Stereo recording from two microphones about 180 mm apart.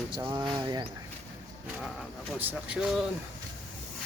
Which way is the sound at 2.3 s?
5° right (ahead or behind).